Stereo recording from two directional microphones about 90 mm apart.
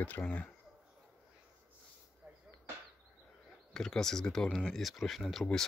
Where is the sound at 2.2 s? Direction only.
15° right (ahead or behind).